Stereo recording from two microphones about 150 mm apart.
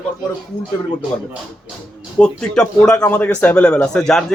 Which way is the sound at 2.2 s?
5° left (ahead or behind).